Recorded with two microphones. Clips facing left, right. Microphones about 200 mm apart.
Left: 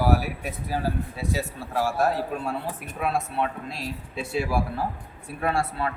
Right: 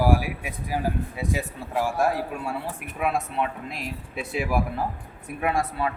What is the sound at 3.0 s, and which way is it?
Speech, 15° right (ahead or behind).